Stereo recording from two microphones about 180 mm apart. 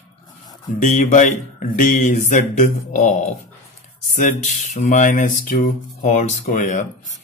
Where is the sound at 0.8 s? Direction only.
40° left (ahead or behind).